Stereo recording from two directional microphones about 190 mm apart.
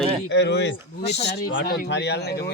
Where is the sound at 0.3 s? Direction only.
65° left (ahead or behind).